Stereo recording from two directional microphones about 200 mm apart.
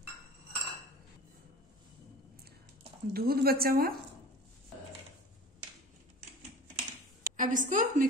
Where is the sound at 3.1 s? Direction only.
50° right (ahead or behind).